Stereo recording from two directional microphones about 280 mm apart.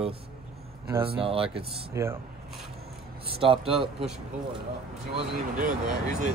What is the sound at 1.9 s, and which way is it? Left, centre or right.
Speech, centre.